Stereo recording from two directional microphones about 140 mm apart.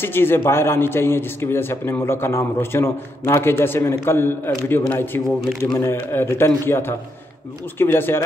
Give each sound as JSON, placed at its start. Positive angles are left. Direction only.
{"t": 0.0, "sound": "a man's voice", "side_deg": 15}